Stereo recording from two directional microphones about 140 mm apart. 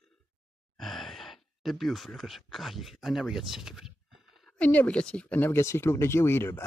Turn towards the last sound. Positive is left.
turn(degrees=15)  # may be behind; listen again after turning